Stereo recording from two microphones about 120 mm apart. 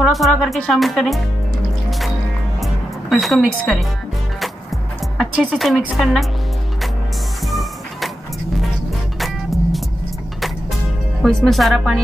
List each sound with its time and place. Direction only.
0.0 s speech: centre (ahead or behind)
1.9 s music: centre (ahead or behind)
5.1 s speech: centre (ahead or behind)
9.2 s vehicle: centre (ahead or behind)
11.2 s speech: centre (ahead or behind)